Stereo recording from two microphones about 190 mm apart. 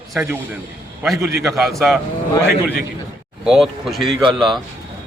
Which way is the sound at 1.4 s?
Centre (ahead or behind).